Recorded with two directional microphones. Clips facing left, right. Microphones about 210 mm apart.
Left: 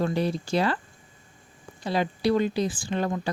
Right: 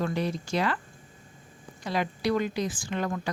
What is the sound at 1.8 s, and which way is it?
Speech, 30° left (ahead or behind).